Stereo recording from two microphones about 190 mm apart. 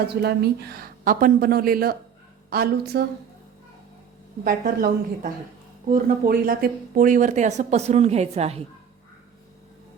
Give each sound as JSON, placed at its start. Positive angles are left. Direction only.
{"t": 0.2, "sound": "a woman's voice", "side_deg": -55}
{"t": 4.4, "sound": "a woman's voice", "side_deg": -50}